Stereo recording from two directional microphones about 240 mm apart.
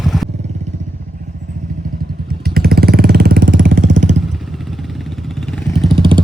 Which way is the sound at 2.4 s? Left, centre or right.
Right.